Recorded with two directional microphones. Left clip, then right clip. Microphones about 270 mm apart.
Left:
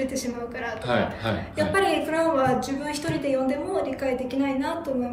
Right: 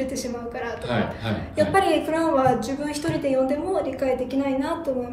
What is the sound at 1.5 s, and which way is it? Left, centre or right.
A woman's voice, centre.